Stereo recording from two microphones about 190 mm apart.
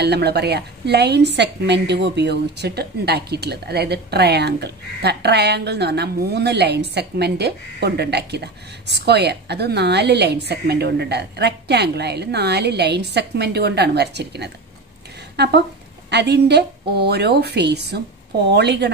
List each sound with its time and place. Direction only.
0.0 s a woman's voice: 60° right (ahead or behind)